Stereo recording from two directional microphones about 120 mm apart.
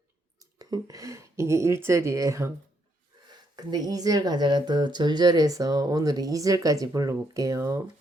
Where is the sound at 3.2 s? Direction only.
35° right (ahead or behind).